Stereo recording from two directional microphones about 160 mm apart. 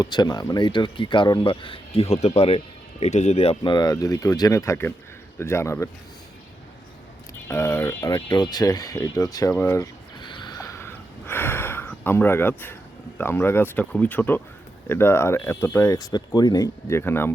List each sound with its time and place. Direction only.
0.0 s speech: 25° left (ahead or behind)
7.4 s speech: 15° left (ahead or behind)